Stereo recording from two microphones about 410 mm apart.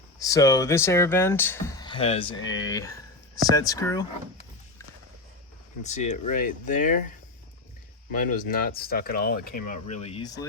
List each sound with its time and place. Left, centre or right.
0.2 s speech: centre
5.8 s speech: centre
8.1 s speech: centre